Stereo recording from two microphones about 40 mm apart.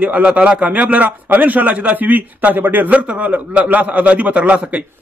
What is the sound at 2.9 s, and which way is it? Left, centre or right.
A man's voice, right.